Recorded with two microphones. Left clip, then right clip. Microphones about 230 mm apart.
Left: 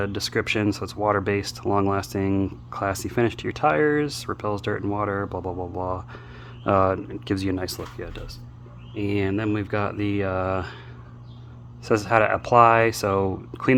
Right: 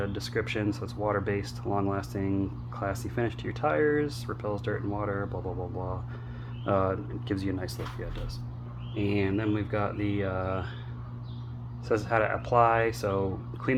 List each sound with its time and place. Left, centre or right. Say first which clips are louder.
0.0 s speech: left 6 dB; left
11.9 s speech: left 7 dB; left